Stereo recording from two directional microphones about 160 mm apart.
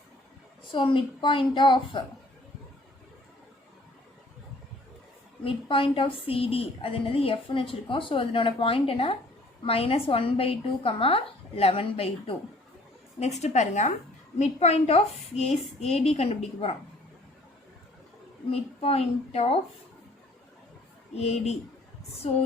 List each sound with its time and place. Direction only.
0.7 s a woman's voice: 30° left (ahead or behind)
5.4 s a woman's voice: 35° left (ahead or behind)
18.5 s a woman's voice: 40° left (ahead or behind)
21.2 s a woman's voice: 40° left (ahead or behind)